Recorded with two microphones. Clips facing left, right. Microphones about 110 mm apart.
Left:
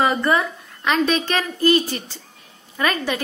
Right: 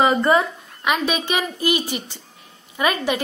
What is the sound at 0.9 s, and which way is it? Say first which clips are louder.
A woman's voice: left 4 dB; 10° right (ahead or behind).